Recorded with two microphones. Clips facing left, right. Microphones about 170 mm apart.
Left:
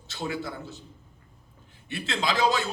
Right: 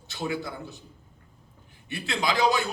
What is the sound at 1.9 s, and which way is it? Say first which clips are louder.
Speech: right 1 dB; 20° right (ahead or behind).